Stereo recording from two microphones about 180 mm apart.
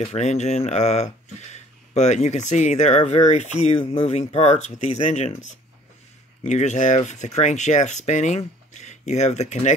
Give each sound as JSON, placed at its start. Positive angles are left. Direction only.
{"t": 0.0, "sound": "speech", "side_deg": 40}